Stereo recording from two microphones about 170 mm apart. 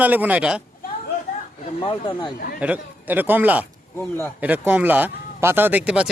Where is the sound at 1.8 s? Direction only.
30° left (ahead or behind).